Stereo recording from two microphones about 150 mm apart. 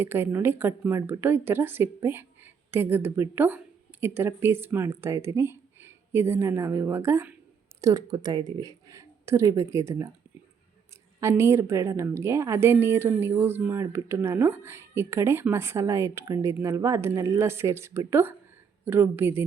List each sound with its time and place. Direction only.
0.0 s speech: 15° right (ahead or behind)
11.2 s speech: 20° right (ahead or behind)